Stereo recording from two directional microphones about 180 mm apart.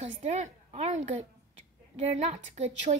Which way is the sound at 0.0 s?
40° right (ahead or behind).